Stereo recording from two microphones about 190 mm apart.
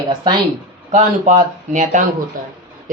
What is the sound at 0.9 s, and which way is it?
Speech, 40° right (ahead or behind).